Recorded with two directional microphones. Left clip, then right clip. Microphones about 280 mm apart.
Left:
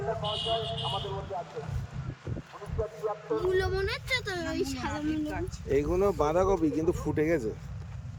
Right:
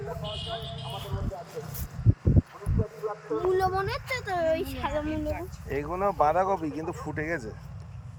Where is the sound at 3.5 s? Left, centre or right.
Centre.